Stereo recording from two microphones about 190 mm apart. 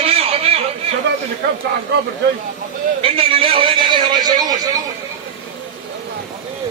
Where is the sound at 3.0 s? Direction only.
30° right (ahead or behind).